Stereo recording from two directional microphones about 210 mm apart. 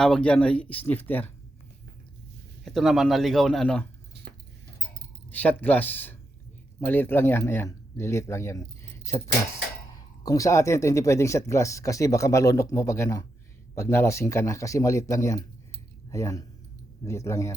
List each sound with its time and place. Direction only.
0.0 s speech: 5° left (ahead or behind)
2.6 s speech: centre (ahead or behind)
5.3 s speech: 10° left (ahead or behind)